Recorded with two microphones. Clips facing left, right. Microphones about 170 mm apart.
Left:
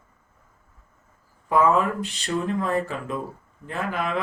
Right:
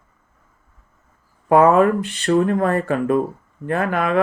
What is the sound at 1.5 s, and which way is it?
Speech, 60° right (ahead or behind).